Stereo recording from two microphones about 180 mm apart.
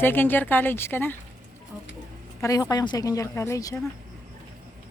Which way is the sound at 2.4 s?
20° left (ahead or behind).